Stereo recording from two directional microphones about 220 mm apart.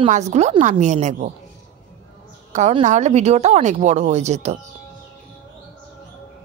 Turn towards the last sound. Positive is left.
turn(degrees=-30)  # may be behind; listen again after turning